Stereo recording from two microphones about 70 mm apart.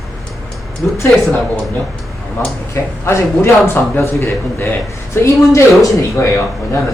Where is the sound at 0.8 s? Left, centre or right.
Centre.